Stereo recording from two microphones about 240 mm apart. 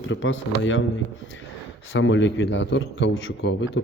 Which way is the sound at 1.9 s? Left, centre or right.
Left.